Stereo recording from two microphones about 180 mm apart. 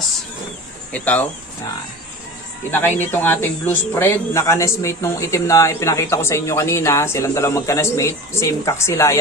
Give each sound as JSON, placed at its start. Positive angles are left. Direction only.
{"t": 0.9, "sound": "a man's voice", "side_deg": 10}
{"t": 2.7, "sound": "a man's voice", "side_deg": 10}